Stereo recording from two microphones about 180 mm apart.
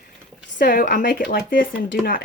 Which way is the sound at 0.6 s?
50° left (ahead or behind).